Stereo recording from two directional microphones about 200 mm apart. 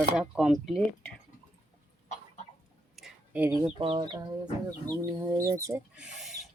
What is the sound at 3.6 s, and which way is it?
Speech, 25° right (ahead or behind).